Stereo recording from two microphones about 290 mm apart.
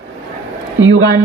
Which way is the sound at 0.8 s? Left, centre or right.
Right.